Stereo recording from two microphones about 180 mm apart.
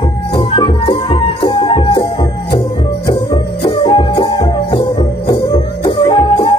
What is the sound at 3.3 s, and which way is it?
Music, 30° left (ahead or behind).